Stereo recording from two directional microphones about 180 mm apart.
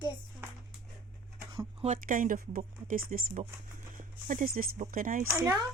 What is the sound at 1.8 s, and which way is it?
Speech, 45° right (ahead or behind).